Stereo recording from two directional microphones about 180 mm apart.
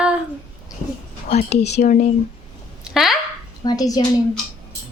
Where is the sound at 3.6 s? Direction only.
20° left (ahead or behind).